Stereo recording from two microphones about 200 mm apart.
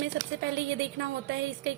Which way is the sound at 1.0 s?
60° right (ahead or behind).